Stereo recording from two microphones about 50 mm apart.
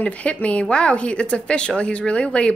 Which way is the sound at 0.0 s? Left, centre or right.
Left.